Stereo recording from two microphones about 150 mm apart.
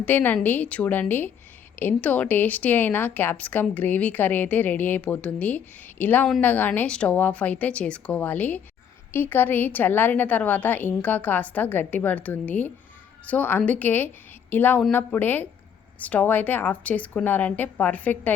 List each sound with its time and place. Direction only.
0.0 s speech: 10° left (ahead or behind)